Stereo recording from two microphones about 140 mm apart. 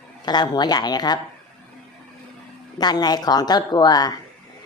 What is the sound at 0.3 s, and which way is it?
Speech, 30° left (ahead or behind).